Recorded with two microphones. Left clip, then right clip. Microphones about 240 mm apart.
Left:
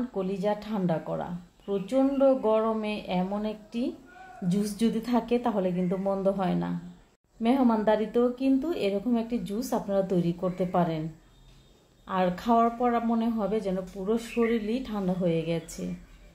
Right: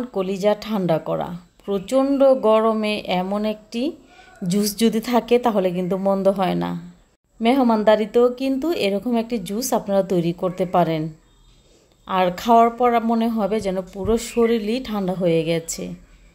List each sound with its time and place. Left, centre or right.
0.1 s speech: right
12.1 s speech: right